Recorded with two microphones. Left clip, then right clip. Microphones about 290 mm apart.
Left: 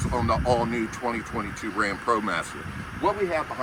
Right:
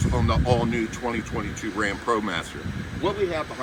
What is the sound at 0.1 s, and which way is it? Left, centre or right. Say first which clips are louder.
Speech: left 1 dB; centre.